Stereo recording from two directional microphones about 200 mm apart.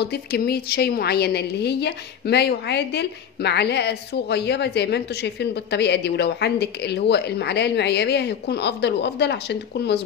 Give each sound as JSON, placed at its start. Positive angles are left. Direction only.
{"t": 0.0, "sound": "a woman's voice", "side_deg": 50}